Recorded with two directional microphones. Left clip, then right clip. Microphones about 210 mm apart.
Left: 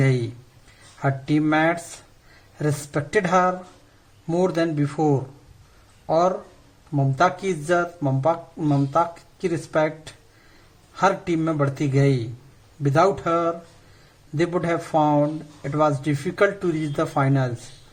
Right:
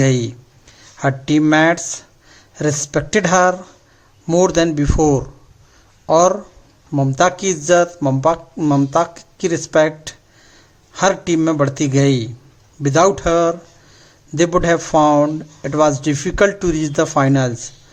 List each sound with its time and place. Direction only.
0.0 s speech: 35° right (ahead or behind)